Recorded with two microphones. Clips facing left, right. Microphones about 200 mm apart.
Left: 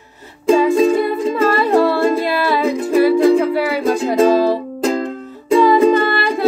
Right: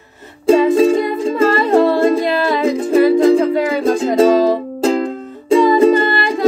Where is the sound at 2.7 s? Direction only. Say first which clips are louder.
Right 2 dB; 30° right (ahead or behind).